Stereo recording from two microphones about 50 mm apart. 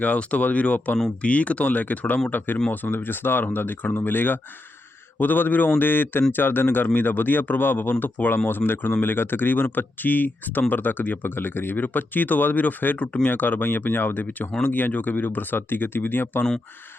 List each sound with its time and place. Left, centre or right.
0.0 s speech: left